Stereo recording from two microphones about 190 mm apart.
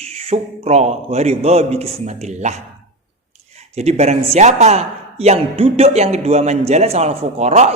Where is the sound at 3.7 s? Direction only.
35° right (ahead or behind).